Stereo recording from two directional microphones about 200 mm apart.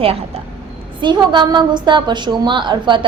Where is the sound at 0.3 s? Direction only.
30° right (ahead or behind).